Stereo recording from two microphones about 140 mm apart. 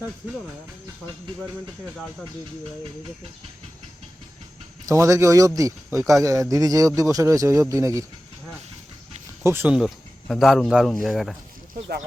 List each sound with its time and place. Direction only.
4.9 s speech: 20° right (ahead or behind)
9.4 s speech: 15° right (ahead or behind)
9.7 s speech: centre (ahead or behind)